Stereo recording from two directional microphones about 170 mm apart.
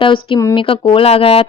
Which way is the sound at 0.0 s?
30° left (ahead or behind).